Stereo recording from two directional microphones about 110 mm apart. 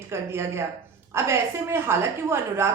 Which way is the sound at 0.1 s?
25° right (ahead or behind).